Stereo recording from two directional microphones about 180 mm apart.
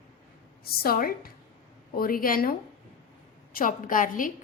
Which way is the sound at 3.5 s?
50° left (ahead or behind).